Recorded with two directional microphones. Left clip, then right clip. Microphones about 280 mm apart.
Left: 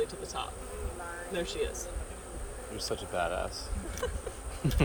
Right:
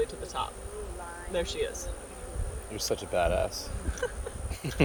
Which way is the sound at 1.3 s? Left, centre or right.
Centre.